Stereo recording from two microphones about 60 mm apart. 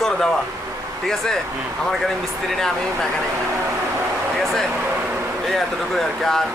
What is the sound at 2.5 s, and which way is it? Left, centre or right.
Speech, centre.